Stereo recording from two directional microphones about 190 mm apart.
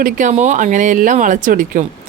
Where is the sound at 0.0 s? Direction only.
40° right (ahead or behind).